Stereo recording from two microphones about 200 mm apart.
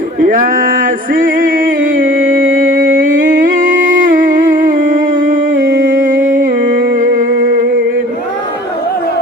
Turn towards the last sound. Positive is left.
turn(degrees=-40)  # may be behind; listen again after turning